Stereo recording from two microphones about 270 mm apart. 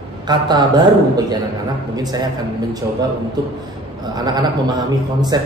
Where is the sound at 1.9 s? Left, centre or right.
Centre.